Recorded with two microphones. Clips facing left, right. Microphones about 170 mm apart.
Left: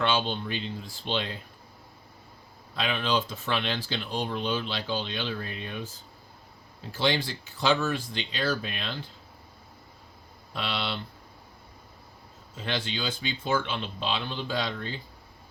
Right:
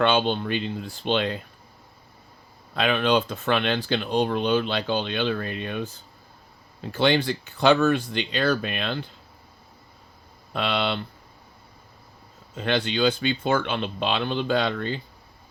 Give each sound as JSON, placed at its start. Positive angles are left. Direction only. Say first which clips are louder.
{"t": 0.0, "sound": "speech", "louder": "right 6 dB", "side_deg": -60}
{"t": 2.7, "sound": "speech", "louder": "right 6 dB", "side_deg": -60}
{"t": 6.9, "sound": "speech", "louder": "right 6 dB", "side_deg": -60}
{"t": 10.5, "sound": "speech", "louder": "right 7 dB", "side_deg": -60}
{"t": 12.5, "sound": "speech", "louder": "right 8 dB", "side_deg": -65}